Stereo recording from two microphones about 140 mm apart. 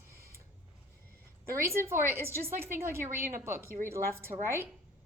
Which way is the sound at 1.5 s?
20° right (ahead or behind).